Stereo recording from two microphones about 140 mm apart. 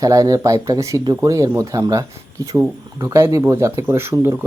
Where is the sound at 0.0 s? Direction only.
25° right (ahead or behind).